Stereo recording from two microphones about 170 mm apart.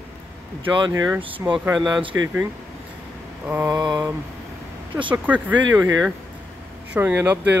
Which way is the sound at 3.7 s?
25° right (ahead or behind).